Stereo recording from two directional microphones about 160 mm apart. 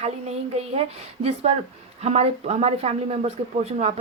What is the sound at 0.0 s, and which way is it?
Speech, 40° right (ahead or behind).